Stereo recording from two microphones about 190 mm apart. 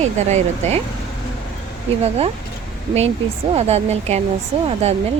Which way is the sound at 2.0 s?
30° right (ahead or behind).